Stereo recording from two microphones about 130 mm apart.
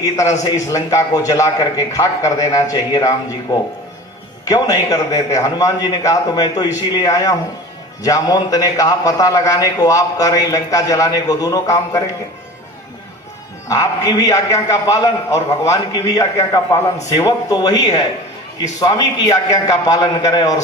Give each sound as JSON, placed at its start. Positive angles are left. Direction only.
{"t": 0.5, "sound": "a man's voice", "side_deg": 25}
{"t": 4.4, "sound": "a man's voice", "side_deg": 30}
{"t": 13.7, "sound": "a man's voice", "side_deg": 25}